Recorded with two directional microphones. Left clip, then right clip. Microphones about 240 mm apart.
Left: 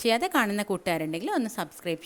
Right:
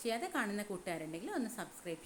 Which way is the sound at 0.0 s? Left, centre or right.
Left.